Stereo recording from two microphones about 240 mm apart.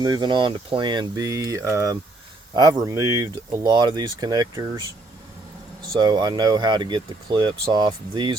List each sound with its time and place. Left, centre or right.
0.0 s speech: centre
5.9 s speech: centre